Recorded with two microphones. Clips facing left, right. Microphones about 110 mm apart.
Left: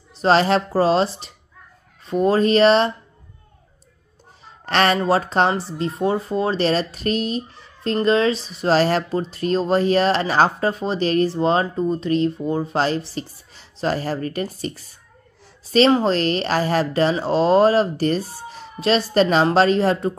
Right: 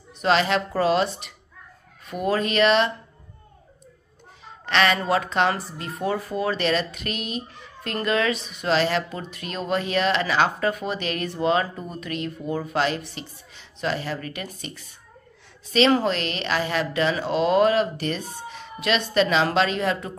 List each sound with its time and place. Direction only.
0.2 s speech: 35° left (ahead or behind)
4.6 s speech: 40° left (ahead or behind)